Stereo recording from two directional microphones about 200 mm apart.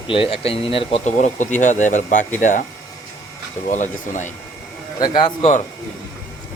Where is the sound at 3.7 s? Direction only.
40° left (ahead or behind).